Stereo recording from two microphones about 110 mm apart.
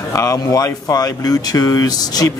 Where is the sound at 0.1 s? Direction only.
30° left (ahead or behind).